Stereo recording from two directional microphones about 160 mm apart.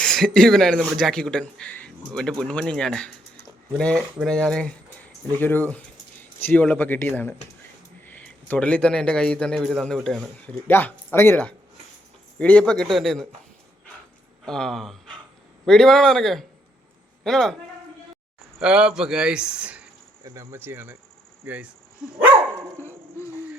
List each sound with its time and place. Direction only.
0.0 s a man's voice: 5° left (ahead or behind)
10.7 s a man's voice: 15° left (ahead or behind)
14.4 s a man's voice: 5° left (ahead or behind)
18.6 s a man's voice: 5° right (ahead or behind)
20.2 s speech: 20° right (ahead or behind)
23.2 s music: 15° left (ahead or behind)